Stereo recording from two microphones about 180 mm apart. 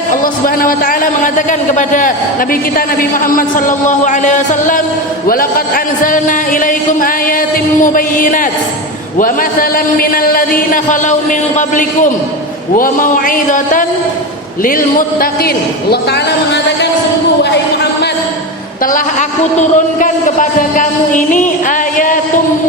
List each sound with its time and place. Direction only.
0.1 s a man's voice: 50° left (ahead or behind)
19.5 s a man's voice: 45° left (ahead or behind)